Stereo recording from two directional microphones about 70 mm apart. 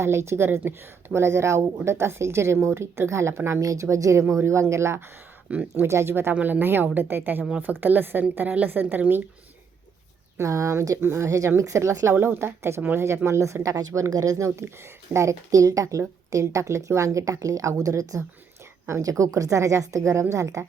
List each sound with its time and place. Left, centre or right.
0.0 s speech: right
5.5 s speech: right
5.8 s speech: right
10.3 s a woman's voice: right
11.0 s speech: right
11.3 s a woman's voice: right
12.1 s a woman's voice: right